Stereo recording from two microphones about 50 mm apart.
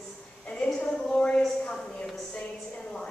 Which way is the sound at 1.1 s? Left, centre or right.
Left.